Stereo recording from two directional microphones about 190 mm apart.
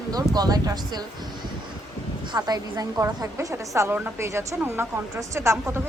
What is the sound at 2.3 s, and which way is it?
A woman's voice, 20° right (ahead or behind).